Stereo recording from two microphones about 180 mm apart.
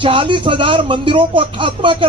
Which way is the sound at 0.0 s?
30° right (ahead or behind).